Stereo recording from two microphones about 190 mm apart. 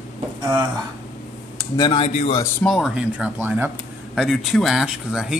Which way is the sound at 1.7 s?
25° left (ahead or behind).